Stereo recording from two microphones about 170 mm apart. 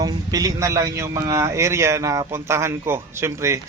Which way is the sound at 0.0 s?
20° right (ahead or behind).